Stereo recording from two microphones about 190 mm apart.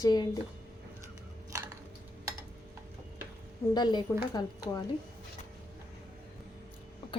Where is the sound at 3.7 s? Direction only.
20° left (ahead or behind).